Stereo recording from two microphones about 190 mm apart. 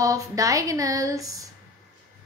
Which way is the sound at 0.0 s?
15° right (ahead or behind).